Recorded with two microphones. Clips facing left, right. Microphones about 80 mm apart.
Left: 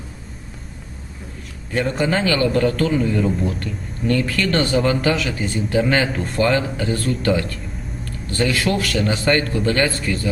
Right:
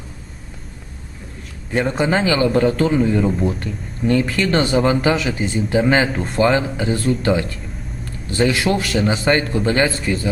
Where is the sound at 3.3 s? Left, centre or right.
Centre.